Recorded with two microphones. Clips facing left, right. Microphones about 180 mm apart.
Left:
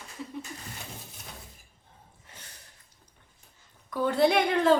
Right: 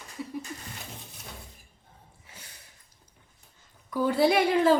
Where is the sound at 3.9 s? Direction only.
5° right (ahead or behind).